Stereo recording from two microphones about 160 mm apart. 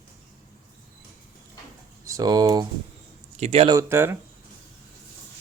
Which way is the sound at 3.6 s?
20° right (ahead or behind).